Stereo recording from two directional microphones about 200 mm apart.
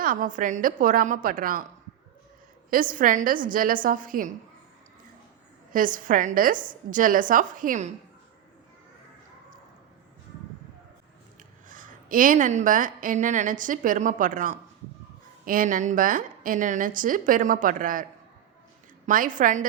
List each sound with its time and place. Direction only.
0.0 s a woman's voice: 45° right (ahead or behind)
2.6 s a woman's voice: 45° right (ahead or behind)
5.7 s a woman's voice: 45° right (ahead or behind)
11.7 s a woman's voice: 45° right (ahead or behind)
19.0 s a woman's voice: 40° right (ahead or behind)